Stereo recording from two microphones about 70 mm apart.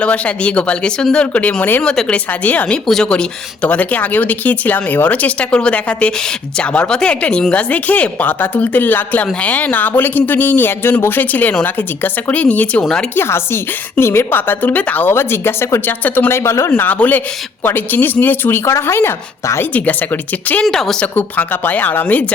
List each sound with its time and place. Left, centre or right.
0.0 s speech: centre
1.8 s speech: centre
2.8 s a woman's voice: centre
3.1 s speech: centre
13.1 s a woman's voice: left
15.9 s speech: left
16.3 s a woman's voice: left
19.7 s speech: left
20.7 s a woman's voice: centre
21.2 s speech: left